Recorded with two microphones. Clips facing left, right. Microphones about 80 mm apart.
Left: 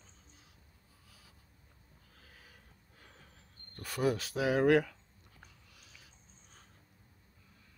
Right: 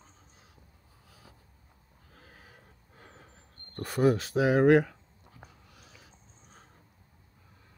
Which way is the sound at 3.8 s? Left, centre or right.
Right.